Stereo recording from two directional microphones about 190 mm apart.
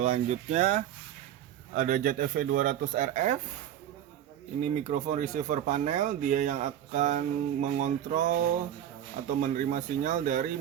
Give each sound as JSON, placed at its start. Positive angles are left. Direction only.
{"t": 0.0, "sound": "speech", "side_deg": -35}
{"t": 4.6, "sound": "speech", "side_deg": -40}
{"t": 9.4, "sound": "speech", "side_deg": -40}